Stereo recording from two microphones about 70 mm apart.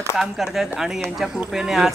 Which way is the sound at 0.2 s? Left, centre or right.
Centre.